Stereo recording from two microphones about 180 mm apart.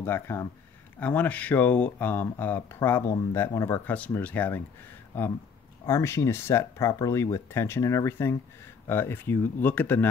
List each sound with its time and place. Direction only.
0.0 s speech: 15° left (ahead or behind)